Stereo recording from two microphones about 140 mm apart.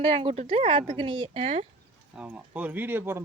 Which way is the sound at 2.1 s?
10° right (ahead or behind).